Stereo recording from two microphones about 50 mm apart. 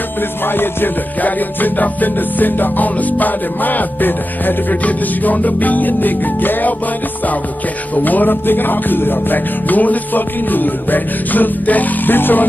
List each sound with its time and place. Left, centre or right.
1.2 s music: left
7.9 s music: left